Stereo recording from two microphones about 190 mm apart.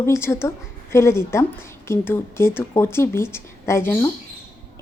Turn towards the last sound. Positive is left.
turn(degrees=10)  # may be behind; listen again after turning